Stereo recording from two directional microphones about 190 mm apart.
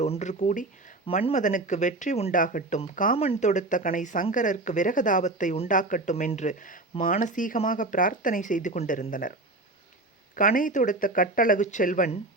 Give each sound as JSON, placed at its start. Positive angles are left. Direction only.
{"t": 0.0, "sound": "speech", "side_deg": 35}
{"t": 10.3, "sound": "speech", "side_deg": 45}